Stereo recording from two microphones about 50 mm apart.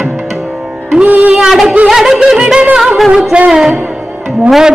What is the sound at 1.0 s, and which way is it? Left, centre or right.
Music, right.